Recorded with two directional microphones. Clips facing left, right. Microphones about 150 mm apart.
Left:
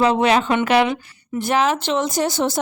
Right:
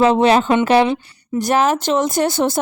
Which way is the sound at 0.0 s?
30° right (ahead or behind).